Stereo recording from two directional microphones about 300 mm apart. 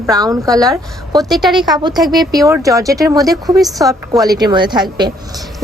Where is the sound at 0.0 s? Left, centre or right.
Centre.